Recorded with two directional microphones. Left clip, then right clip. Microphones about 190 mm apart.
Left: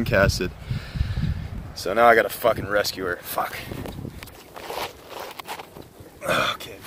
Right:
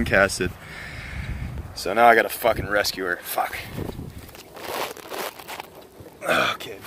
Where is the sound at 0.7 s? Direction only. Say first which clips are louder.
Right 2 dB; 90° left.